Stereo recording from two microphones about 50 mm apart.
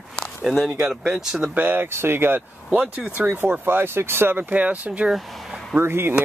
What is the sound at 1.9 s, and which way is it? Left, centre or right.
Speech, right.